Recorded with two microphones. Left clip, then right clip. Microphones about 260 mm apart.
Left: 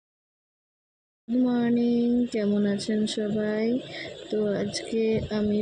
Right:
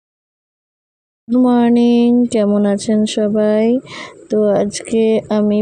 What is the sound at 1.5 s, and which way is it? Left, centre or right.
Speech, right.